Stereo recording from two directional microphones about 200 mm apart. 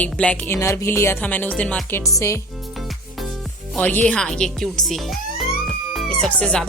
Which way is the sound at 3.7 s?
10° left (ahead or behind).